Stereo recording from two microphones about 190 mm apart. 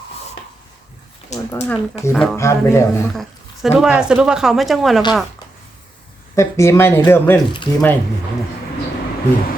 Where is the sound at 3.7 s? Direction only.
5° right (ahead or behind).